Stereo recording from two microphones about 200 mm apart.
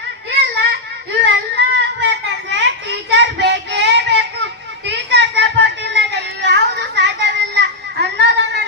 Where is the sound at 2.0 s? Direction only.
60° right (ahead or behind).